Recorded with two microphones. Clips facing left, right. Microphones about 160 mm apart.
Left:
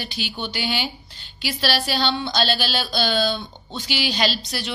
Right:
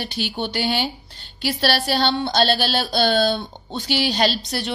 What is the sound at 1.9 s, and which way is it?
A woman's voice, 60° right (ahead or behind).